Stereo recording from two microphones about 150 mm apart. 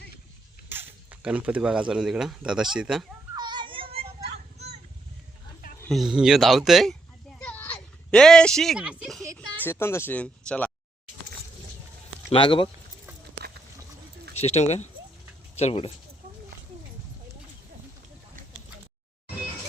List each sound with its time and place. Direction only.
0.7 s speech: 10° right (ahead or behind)
3.3 s children playing: 30° right (ahead or behind)
5.9 s speech: centre (ahead or behind)
7.3 s a sound: 10° left (ahead or behind); by 9.1 s 5° right (ahead or behind)
9.2 s a sound: 20° right (ahead or behind)
9.6 s speech: 15° left (ahead or behind)
12.3 s speech: 35° left (ahead or behind)
14.3 s speech: 45° left (ahead or behind)